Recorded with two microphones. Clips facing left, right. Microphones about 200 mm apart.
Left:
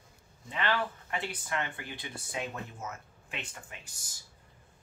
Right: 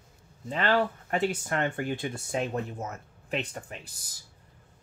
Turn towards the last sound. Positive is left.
turn(degrees=-35)  # may be behind; listen again after turning